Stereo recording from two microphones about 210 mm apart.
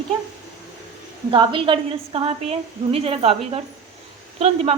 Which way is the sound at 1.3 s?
25° right (ahead or behind).